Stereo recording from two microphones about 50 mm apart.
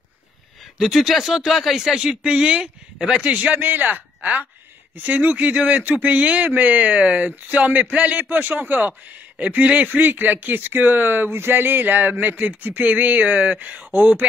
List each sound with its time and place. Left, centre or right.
0.7 s speech: centre
3.3 s speech: right
13.9 s speech: right